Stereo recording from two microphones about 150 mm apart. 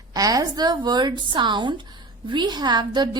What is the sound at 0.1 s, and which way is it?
A woman's voice, 25° right (ahead or behind).